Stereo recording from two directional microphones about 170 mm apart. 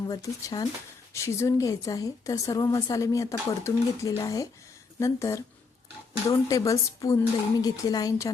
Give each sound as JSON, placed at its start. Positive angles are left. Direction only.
{"t": 0.0, "sound": "a woman's voice", "side_deg": 20}